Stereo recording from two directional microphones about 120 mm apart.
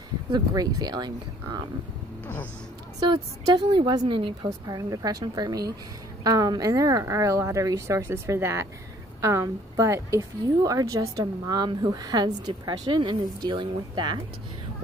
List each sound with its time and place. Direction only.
0.3 s speech: 30° right (ahead or behind)
3.0 s speech: 35° right (ahead or behind)
4.6 s a woman's voice: 30° right (ahead or behind)